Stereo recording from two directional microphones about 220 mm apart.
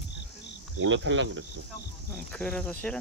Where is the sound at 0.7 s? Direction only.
60° right (ahead or behind).